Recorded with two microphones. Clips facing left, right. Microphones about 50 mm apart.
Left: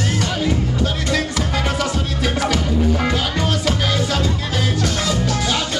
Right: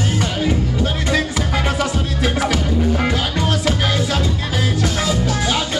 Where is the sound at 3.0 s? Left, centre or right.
Centre.